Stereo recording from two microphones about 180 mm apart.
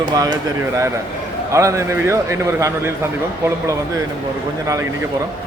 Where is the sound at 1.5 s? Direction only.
15° right (ahead or behind).